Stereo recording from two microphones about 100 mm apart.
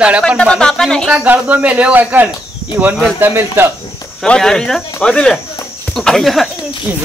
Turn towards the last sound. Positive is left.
turn(degrees=0)  # may be behind; listen again after turning